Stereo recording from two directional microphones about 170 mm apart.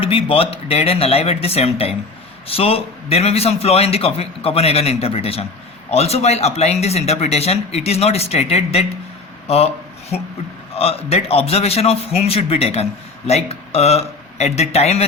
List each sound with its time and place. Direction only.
0.0 s a man's voice: 35° left (ahead or behind)